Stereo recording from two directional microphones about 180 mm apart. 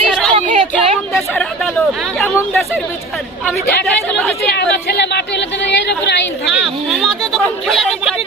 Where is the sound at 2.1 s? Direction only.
Centre (ahead or behind).